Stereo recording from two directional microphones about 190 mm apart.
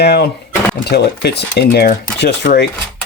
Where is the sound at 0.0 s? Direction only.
60° left (ahead or behind).